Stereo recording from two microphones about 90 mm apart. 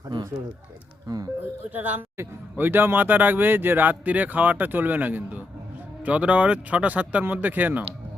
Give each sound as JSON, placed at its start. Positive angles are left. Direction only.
{"t": 1.0, "sound": "speech", "side_deg": -45}
{"t": 1.7, "sound": "speech", "side_deg": -20}